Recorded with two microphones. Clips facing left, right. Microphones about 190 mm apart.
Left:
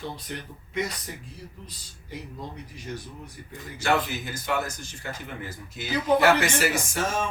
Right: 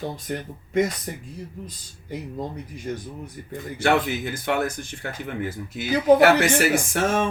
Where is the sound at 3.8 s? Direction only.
60° right (ahead or behind).